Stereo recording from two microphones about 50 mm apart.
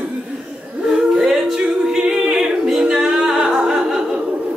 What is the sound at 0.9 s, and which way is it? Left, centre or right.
A capella, centre.